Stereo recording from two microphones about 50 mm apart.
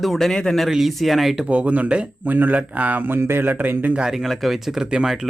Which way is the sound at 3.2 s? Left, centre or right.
Right.